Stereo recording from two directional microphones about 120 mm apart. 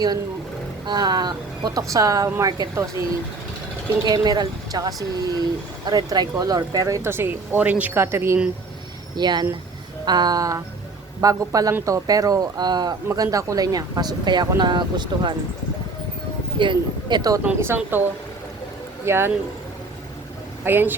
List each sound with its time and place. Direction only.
0.9 s speech: 35° right (ahead or behind)
4.0 s speech: 35° right (ahead or behind)
9.1 s speech: 35° right (ahead or behind)
16.6 s speech: 40° right (ahead or behind)
17.6 s speech: 20° right (ahead or behind)
19.0 s speech: 20° right (ahead or behind)
20.7 s speech: 15° right (ahead or behind)